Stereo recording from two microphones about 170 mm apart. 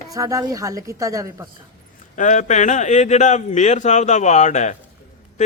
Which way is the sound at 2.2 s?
45° left (ahead or behind).